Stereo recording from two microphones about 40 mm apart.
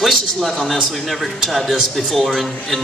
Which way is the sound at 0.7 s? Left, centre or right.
Centre.